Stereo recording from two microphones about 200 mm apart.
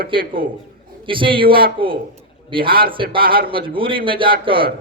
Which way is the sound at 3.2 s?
45° right (ahead or behind).